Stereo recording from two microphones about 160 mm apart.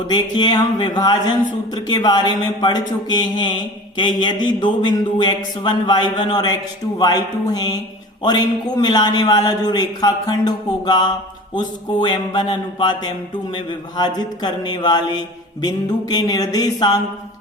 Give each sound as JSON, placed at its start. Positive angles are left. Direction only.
{"t": 0.1, "sound": "a man's voice", "side_deg": 25}